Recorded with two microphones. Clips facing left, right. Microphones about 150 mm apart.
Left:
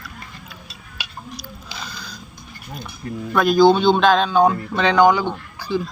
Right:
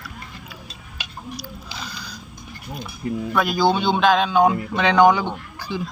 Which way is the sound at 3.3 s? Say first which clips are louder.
Left 7 dB; 10° right (ahead or behind).